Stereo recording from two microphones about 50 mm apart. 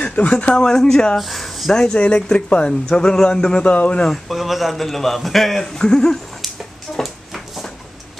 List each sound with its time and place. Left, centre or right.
0.0 s speech: left; by 1.7 s centre
1.7 s speech: centre
4.1 s a man's voice: centre
7.0 s a sound: centre